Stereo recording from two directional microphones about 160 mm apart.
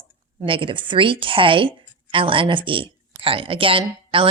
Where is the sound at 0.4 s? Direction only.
30° right (ahead or behind).